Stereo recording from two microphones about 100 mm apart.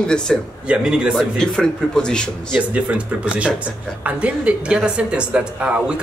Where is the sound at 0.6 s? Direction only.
10° right (ahead or behind).